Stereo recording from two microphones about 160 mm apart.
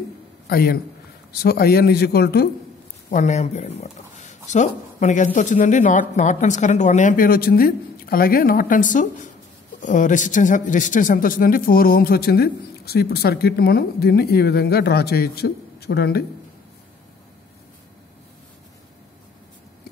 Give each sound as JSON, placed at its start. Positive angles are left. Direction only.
{"t": 0.5, "sound": "a man's voice", "side_deg": 70}
{"t": 3.1, "sound": "a man's voice", "side_deg": 50}